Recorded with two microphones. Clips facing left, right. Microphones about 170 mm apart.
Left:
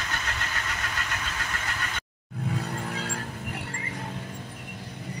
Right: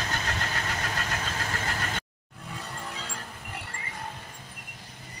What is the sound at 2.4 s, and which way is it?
Vehicle, 65° left (ahead or behind).